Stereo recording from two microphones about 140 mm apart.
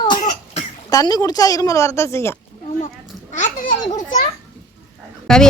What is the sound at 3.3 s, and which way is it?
Babbling, 60° left (ahead or behind).